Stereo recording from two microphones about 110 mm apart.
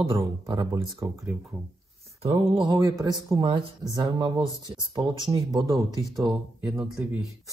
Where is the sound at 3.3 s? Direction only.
55° right (ahead or behind).